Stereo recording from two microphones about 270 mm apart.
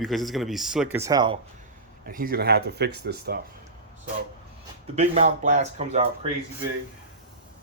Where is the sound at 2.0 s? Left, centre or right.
Right.